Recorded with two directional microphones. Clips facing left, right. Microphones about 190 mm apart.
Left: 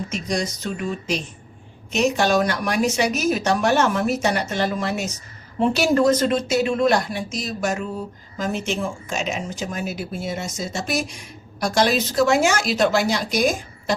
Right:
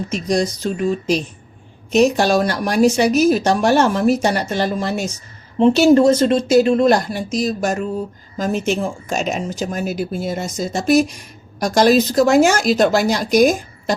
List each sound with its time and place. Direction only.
0.1 s speech: 35° right (ahead or behind)
5.5 s speech: 25° right (ahead or behind); by 13.9 s 45° right (ahead or behind)